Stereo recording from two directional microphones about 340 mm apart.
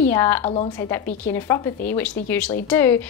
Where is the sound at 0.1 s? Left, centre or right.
Centre.